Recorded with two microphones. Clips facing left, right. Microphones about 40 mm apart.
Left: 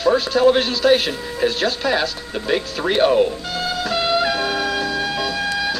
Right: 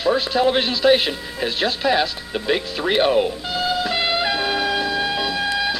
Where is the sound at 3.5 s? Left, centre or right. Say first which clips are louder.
Right 4 dB; right.